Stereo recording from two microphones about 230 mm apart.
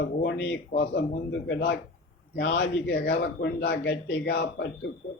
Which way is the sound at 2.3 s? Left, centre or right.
Left.